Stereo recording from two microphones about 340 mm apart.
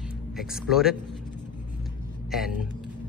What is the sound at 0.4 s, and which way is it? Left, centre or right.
Speech, centre.